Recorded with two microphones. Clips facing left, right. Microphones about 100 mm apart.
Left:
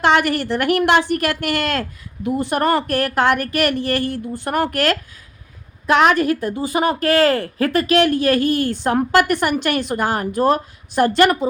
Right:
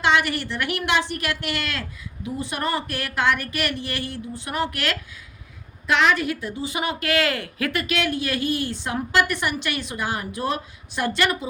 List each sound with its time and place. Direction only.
0.0 s a woman's voice: 50° left (ahead or behind)